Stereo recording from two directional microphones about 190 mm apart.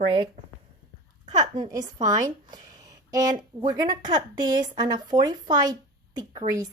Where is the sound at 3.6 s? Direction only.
20° right (ahead or behind).